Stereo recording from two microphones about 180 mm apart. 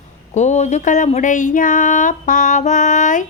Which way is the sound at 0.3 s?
40° left (ahead or behind).